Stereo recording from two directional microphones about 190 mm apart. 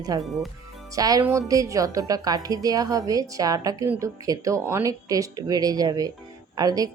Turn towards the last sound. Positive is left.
turn(degrees=-20)  # may be behind; listen again after turning